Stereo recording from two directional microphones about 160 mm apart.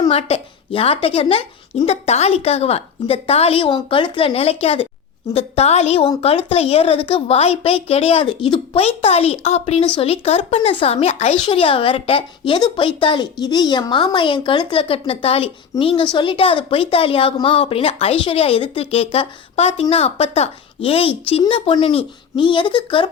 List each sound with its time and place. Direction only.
0.1 s a woman's voice: 40° left (ahead or behind)